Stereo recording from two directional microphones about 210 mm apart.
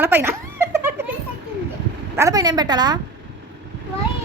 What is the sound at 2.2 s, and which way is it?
Speech, 15° right (ahead or behind).